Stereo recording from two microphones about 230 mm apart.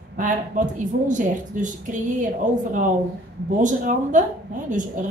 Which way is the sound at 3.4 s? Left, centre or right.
Right.